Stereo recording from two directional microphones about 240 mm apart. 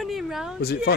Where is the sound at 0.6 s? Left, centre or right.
Left.